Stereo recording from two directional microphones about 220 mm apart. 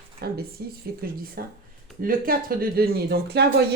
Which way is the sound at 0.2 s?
45° right (ahead or behind).